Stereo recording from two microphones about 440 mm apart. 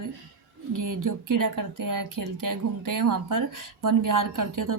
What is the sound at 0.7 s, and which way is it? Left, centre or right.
Speech, right.